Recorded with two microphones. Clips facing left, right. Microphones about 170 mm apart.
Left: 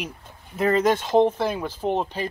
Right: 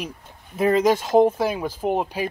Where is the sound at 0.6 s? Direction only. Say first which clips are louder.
Right 2 dB; 10° right (ahead or behind).